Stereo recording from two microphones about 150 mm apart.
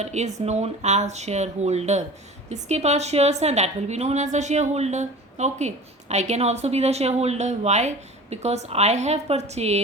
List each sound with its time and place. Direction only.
0.0 s a woman's voice: 50° right (ahead or behind)